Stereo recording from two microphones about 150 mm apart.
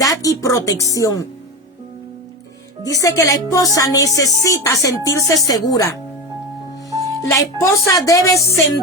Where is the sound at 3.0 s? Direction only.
20° left (ahead or behind).